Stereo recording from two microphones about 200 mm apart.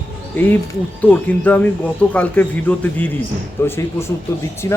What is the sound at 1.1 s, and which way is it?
Speech, 10° left (ahead or behind).